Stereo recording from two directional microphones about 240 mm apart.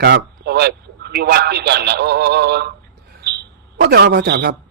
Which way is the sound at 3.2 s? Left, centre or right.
Right.